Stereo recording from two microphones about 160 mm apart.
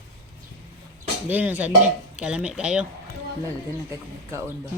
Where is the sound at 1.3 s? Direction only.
10° right (ahead or behind).